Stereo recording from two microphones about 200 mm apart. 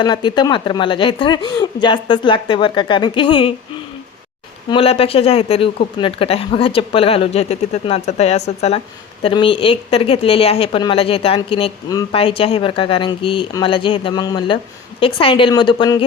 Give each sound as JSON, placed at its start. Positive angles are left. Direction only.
{"t": 0.0, "sound": "speech", "side_deg": 25}
{"t": 4.7, "sound": "speech", "side_deg": 30}